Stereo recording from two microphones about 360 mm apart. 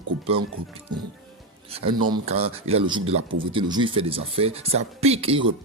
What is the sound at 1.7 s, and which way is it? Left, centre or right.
Speech, centre.